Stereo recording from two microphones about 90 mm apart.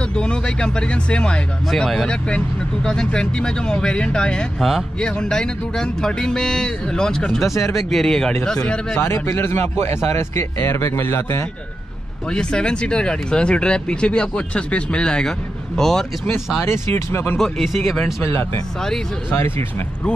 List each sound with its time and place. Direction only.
0.1 s speech: 10° left (ahead or behind)
9.0 s a man's voice: 30° left (ahead or behind)
12.3 s speech: 10° left (ahead or behind)
16.6 s a man's voice: 25° left (ahead or behind)
17.4 s speech: centre (ahead or behind)
18.2 s a man's voice: 25° left (ahead or behind)